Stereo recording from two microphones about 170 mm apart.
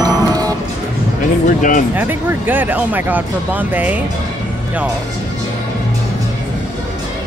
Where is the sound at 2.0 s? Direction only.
10° right (ahead or behind).